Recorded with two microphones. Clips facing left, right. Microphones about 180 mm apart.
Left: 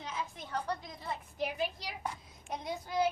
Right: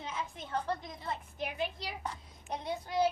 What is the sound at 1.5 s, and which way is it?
Speech, 25° right (ahead or behind).